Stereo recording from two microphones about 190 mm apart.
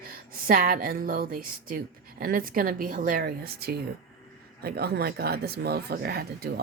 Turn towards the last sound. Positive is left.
turn(degrees=-55)  # may be behind; listen again after turning